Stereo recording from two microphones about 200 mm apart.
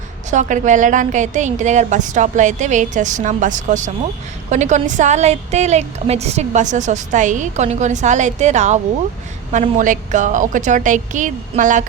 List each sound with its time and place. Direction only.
0.3 s a woman's voice: 40° right (ahead or behind)